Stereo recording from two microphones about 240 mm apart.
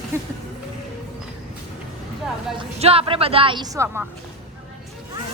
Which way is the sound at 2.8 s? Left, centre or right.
Right.